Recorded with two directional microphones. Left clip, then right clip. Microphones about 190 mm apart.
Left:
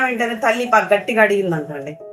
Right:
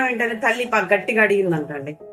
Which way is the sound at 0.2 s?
20° right (ahead or behind).